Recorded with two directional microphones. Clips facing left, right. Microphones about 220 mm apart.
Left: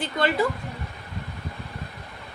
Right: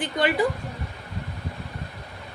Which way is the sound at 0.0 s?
15° right (ahead or behind).